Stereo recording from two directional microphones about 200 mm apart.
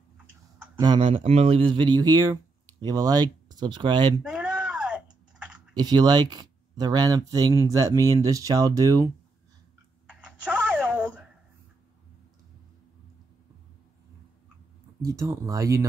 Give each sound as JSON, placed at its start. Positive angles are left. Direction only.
{"t": 0.7, "sound": "speech", "side_deg": -25}
{"t": 4.2, "sound": "typing", "side_deg": -5}
{"t": 5.8, "sound": "speech", "side_deg": -20}
{"t": 10.0, "sound": "typing", "side_deg": -5}
{"t": 15.0, "sound": "speech", "side_deg": -15}